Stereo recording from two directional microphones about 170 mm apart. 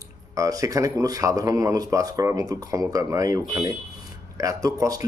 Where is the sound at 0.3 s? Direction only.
20° right (ahead or behind).